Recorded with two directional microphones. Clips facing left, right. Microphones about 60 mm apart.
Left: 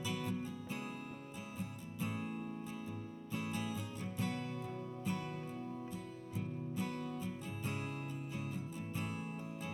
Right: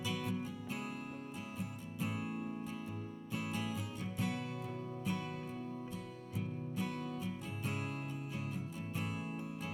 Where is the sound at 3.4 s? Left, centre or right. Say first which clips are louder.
Right 1 dB; right.